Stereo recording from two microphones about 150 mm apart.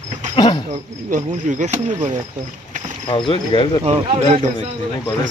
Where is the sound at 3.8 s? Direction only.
35° right (ahead or behind).